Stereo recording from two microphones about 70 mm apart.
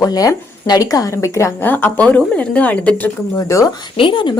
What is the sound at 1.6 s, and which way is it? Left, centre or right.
Speech, left.